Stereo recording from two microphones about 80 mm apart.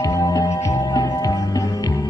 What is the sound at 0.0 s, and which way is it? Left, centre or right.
Music, left.